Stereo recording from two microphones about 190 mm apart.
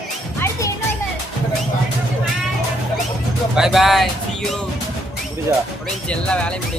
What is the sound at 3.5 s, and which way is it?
Speech, centre (ahead or behind).